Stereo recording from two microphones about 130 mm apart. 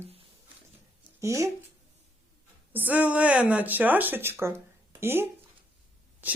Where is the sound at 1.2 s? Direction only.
25° right (ahead or behind).